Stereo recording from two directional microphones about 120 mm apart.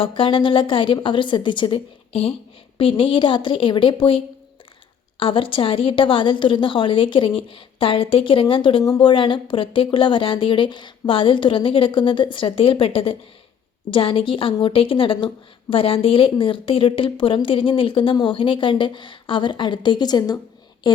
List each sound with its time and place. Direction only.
0.0 s a woman's voice: 45° left (ahead or behind)
5.2 s a woman's voice: 50° left (ahead or behind)